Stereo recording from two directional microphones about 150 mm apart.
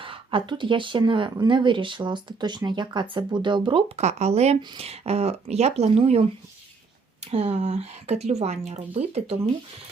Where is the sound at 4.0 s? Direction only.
50° right (ahead or behind).